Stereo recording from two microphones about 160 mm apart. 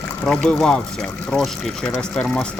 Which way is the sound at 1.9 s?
5° left (ahead or behind).